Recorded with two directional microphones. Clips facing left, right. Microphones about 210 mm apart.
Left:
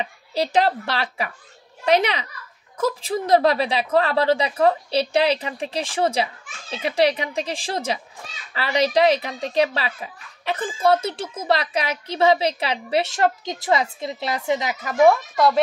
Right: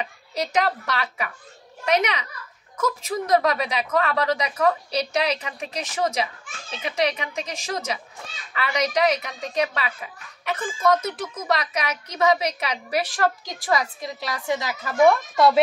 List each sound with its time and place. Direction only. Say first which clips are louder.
0.0 s a woman's voice: left 4 dB; 30° left (ahead or behind)
15.0 s speech: left 1 dB; 5° left (ahead or behind)